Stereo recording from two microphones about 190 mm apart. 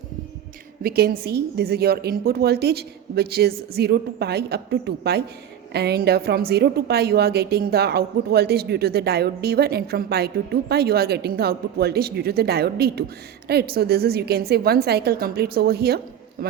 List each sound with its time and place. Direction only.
0.8 s a woman's voice: 55° right (ahead or behind)